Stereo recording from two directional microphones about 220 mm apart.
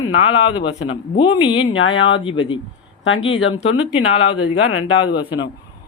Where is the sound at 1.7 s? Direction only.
60° left (ahead or behind).